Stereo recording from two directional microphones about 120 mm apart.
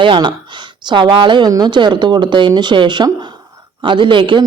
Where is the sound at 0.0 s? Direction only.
45° right (ahead or behind).